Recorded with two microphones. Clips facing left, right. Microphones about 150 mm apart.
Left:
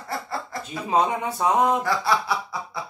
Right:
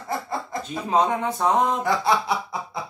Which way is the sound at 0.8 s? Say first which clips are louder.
Right 1 dB; 10° left (ahead or behind).